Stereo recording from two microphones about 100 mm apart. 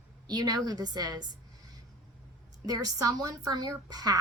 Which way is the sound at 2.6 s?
40° right (ahead or behind).